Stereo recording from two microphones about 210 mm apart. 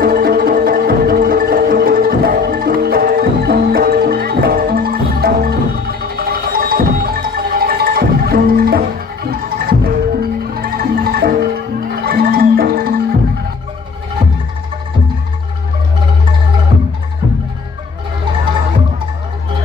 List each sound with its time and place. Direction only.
0.0 s music: 45° right (ahead or behind)